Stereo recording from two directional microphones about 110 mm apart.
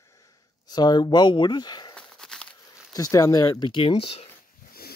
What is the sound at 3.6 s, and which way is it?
Speech, 50° left (ahead or behind).